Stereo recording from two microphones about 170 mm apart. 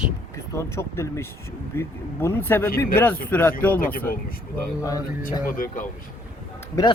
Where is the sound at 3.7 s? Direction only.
55° left (ahead or behind).